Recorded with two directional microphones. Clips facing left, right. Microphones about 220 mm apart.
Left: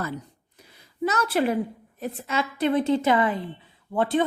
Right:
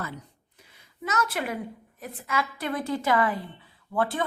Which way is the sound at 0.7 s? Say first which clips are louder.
Left 6 dB; 35° left (ahead or behind).